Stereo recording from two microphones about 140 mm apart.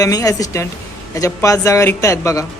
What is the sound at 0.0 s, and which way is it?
A woman's voice, 25° left (ahead or behind).